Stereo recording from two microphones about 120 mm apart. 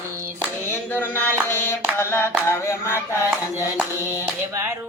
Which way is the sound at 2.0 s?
20° left (ahead or behind).